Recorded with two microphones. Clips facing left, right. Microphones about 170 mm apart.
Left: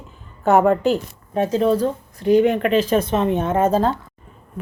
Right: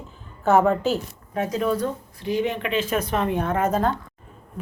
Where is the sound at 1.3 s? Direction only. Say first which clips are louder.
Left 6 dB; 30° left (ahead or behind).